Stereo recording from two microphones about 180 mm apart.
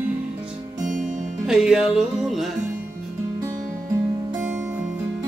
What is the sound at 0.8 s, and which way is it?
Music, 45° right (ahead or behind).